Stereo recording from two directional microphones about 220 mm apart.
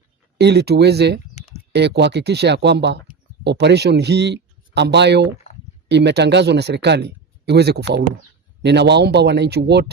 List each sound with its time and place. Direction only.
0.3 s speech: 50° right (ahead or behind)